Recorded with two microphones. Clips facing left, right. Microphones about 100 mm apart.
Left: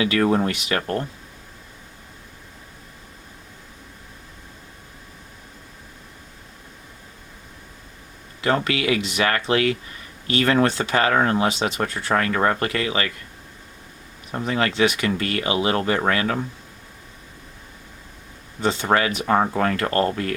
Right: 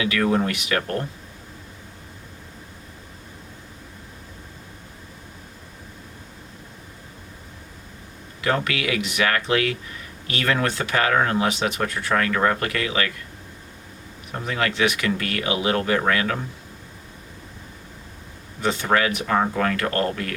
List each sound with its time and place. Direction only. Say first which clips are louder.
0.0 s speech: left 2 dB; 30° left (ahead or behind)
8.4 s speech: left 2 dB; 30° left (ahead or behind)
14.4 s speech: left 2 dB; 30° left (ahead or behind)
18.8 s speech: even; 30° left (ahead or behind)